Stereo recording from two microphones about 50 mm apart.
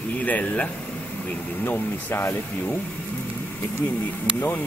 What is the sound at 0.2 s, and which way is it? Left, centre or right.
Speech, left.